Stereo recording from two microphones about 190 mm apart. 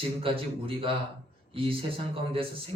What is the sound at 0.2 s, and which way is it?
Speech, 30° right (ahead or behind).